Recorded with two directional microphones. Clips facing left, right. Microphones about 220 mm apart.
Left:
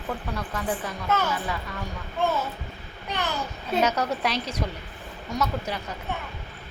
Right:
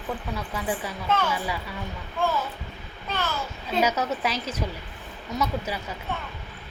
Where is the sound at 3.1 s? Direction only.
15° left (ahead or behind).